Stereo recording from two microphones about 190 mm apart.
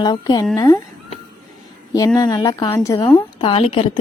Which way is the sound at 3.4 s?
30° left (ahead or behind).